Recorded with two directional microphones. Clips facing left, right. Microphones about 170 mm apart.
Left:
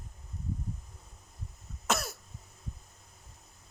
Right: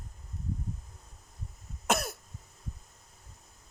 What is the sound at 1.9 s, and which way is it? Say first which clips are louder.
Cough: right 2 dB; 55° right (ahead or behind).